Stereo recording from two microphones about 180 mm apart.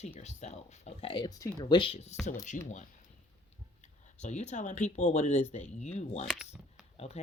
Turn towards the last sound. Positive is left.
turn(degrees=35)  # may be behind; listen again after turning